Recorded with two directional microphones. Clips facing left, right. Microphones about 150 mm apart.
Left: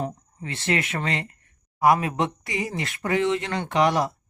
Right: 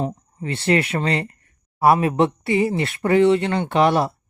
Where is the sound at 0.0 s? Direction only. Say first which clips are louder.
Right 5 dB; 30° right (ahead or behind).